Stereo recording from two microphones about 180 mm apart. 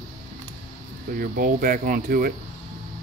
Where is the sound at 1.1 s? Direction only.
50° right (ahead or behind).